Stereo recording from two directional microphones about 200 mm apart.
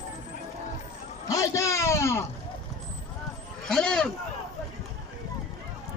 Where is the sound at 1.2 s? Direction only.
15° left (ahead or behind).